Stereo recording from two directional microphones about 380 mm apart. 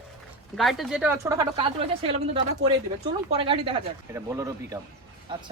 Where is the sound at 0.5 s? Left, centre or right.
Centre.